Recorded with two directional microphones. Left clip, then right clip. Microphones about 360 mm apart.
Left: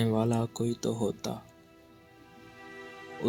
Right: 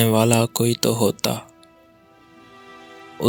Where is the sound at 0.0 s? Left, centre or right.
Right.